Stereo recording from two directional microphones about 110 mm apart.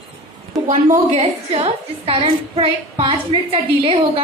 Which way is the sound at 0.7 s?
75° right (ahead or behind).